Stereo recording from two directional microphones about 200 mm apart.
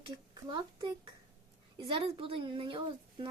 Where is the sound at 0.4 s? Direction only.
25° right (ahead or behind).